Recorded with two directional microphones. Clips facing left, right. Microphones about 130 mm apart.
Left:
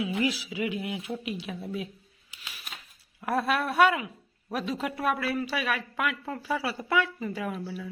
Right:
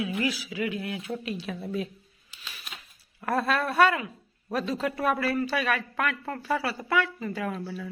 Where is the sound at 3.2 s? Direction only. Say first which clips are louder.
Right 1 dB; 10° left (ahead or behind).